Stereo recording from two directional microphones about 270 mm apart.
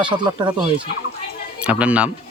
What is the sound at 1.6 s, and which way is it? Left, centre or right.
Speech, centre.